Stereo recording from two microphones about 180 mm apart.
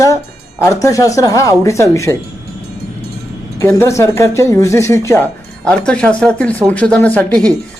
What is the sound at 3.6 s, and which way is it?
Speech, 15° left (ahead or behind).